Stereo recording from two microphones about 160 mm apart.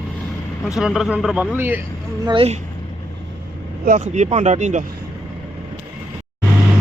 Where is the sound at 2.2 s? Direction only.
35° right (ahead or behind).